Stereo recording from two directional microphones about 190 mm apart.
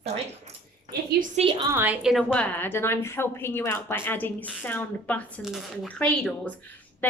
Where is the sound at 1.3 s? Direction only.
25° right (ahead or behind).